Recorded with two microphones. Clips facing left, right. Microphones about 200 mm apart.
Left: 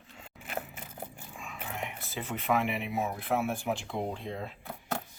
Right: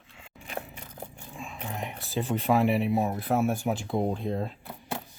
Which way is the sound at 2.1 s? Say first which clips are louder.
Right 5 dB; 35° right (ahead or behind).